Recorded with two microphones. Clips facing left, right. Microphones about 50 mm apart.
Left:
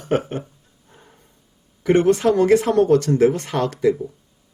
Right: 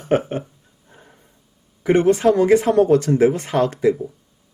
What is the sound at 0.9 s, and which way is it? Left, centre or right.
Snort, centre.